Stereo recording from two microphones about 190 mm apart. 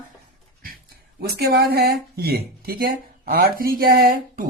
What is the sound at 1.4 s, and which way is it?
Speech, 55° right (ahead or behind).